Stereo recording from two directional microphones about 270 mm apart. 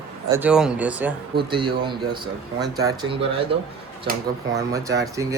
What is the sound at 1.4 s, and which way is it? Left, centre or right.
Speech, centre.